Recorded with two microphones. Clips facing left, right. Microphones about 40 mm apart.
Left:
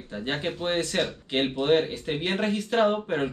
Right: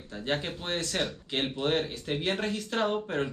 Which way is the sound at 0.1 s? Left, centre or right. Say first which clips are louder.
Left 2 dB; centre.